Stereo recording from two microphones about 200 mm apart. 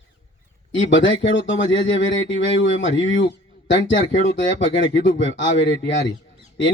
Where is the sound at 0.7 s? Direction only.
70° left (ahead or behind).